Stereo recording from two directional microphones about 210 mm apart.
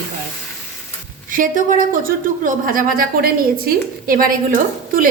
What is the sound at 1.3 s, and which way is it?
Speech, 40° right (ahead or behind).